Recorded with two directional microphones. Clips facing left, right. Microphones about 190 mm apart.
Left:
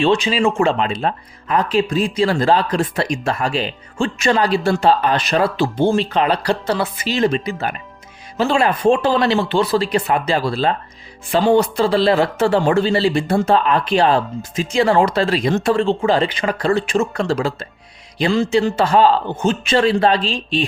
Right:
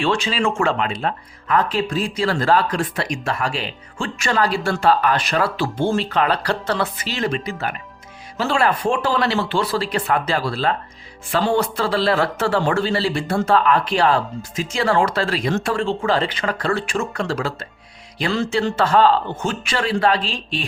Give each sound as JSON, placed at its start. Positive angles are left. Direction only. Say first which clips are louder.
{"t": 0.0, "sound": "a man's voice", "louder": "left 5 dB", "side_deg": 20}